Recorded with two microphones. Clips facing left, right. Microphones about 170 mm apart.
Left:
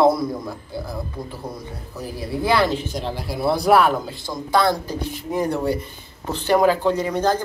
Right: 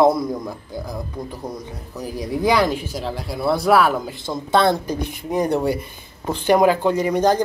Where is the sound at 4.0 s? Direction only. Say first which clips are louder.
Right 2 dB; 20° right (ahead or behind).